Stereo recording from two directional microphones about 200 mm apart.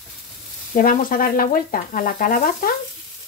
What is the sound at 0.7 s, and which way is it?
Speech, 45° left (ahead or behind).